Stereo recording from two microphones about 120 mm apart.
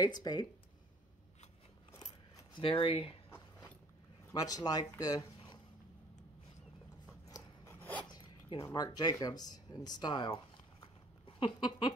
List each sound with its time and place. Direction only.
0.0 s speech: 35° left (ahead or behind)
2.0 s coin: 35° left (ahead or behind)
2.6 s speech: 50° left (ahead or behind)
3.3 s biting: 15° left (ahead or behind)
4.3 s speech: 30° left (ahead or behind)
7.2 s scissors: 30° left (ahead or behind)
8.1 s zipper: 35° left (ahead or behind)
8.6 s speech: 35° left (ahead or behind)
11.2 s a sound: 45° left (ahead or behind)